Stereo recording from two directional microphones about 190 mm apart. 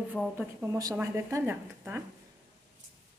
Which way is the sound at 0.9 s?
15° right (ahead or behind).